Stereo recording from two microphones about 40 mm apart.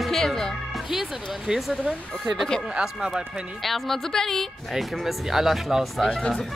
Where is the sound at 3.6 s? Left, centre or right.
Centre.